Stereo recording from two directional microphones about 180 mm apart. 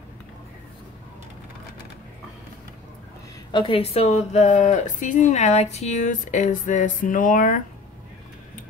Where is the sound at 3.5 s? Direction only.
30° left (ahead or behind); by 7.6 s 45° left (ahead or behind).